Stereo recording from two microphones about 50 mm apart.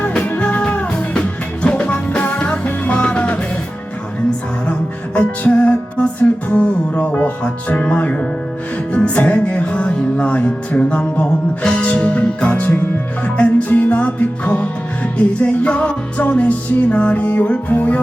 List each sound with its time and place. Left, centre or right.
0.3 s music: left
4.7 s music: left